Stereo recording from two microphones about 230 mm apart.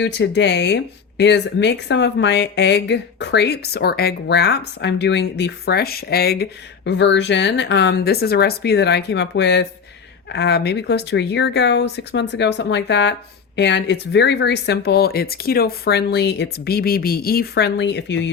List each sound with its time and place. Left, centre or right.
0.0 s speech: left